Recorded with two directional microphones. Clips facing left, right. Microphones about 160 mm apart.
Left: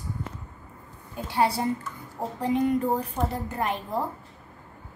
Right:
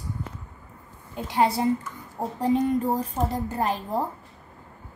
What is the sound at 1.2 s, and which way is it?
Speech, 20° right (ahead or behind).